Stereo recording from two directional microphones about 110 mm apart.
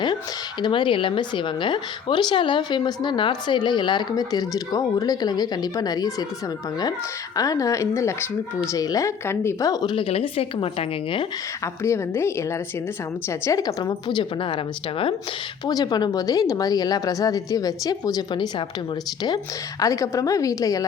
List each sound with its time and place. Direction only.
0.6 s a woman's voice: 45° left (ahead or behind)
7.3 s a woman's voice: 30° left (ahead or behind)
9.9 s a woman's voice: 60° left (ahead or behind)
11.6 s a woman's voice: 25° left (ahead or behind)
13.6 s a woman's voice: 35° left (ahead or behind)
14.2 s a woman's voice: 50° left (ahead or behind)
15.6 s a woman's voice: 40° left (ahead or behind)
19.8 s a woman's voice: 30° left (ahead or behind)